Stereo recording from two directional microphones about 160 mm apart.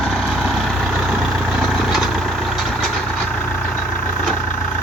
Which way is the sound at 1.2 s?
Centre (ahead or behind).